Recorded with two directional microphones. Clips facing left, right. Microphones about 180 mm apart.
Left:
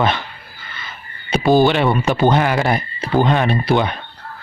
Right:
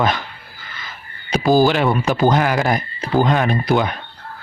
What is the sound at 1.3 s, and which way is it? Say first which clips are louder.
Speech: left 1 dB; centre (ahead or behind).